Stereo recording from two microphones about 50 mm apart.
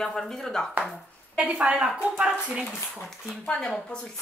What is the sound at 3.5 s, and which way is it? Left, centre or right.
Speech, centre.